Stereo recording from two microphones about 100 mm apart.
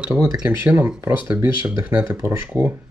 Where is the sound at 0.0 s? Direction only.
10° right (ahead or behind).